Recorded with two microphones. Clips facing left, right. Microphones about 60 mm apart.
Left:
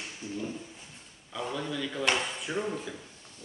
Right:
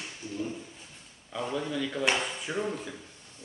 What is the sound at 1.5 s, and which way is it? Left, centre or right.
Speech, centre.